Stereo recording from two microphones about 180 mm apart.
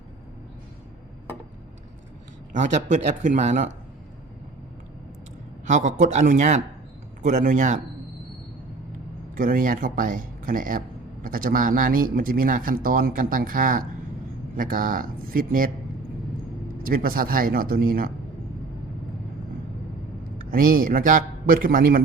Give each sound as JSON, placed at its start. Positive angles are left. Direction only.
{"t": 2.5, "sound": "speech", "side_deg": -40}
{"t": 5.6, "sound": "a man's voice", "side_deg": -45}
{"t": 9.3, "sound": "a man's voice", "side_deg": -50}
{"t": 16.8, "sound": "a man's voice", "side_deg": -55}
{"t": 20.4, "sound": "a man's voice", "side_deg": -50}